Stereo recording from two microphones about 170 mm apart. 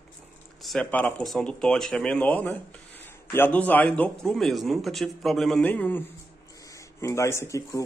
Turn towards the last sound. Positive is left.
turn(degrees=20)  # may be behind; listen again after turning